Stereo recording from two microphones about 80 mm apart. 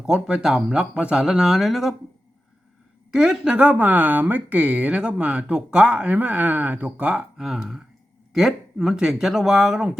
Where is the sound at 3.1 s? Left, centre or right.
Centre.